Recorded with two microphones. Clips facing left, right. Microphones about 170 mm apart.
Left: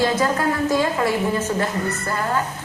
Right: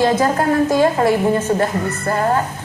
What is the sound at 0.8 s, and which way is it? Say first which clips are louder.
Speech: right 6 dB; 40° right (ahead or behind).